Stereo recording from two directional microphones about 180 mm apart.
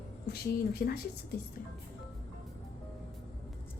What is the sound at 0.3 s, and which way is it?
Speech, 60° left (ahead or behind).